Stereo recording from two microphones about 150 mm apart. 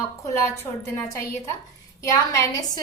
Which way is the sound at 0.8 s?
15° left (ahead or behind).